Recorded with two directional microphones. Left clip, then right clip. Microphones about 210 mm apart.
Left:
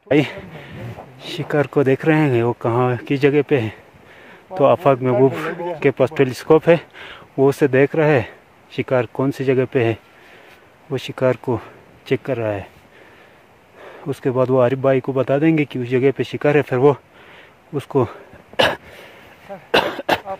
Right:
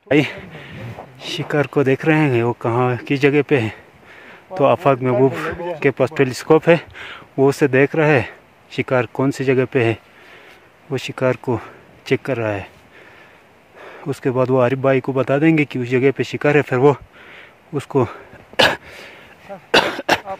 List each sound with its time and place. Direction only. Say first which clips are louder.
0.1 s a man's voice: right 1 dB; 10° right (ahead or behind)
13.7 s speech: right 1 dB; 15° right (ahead or behind)
19.7 s cough: right 2 dB; 20° right (ahead or behind)